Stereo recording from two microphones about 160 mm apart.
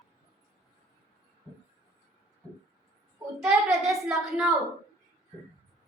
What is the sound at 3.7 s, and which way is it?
Speech, 5° right (ahead or behind).